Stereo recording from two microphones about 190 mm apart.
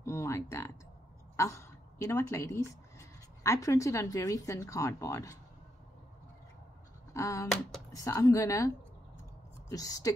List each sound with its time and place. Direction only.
0.0 s a sound: 15° left (ahead or behind)
1.3 s a woman's voice: 15° left (ahead or behind)
7.2 s speech: 15° left (ahead or behind)